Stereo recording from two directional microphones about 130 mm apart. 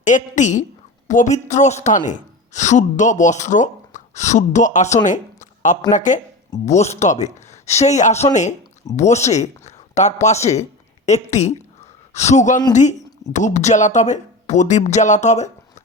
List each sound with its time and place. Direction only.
0.0 s a woman's voice: 70° left (ahead or behind)
5.0 s a sound: 75° left (ahead or behind)
5.9 s a woman's voice: 70° left (ahead or behind)
6.7 s speech: 60° left (ahead or behind)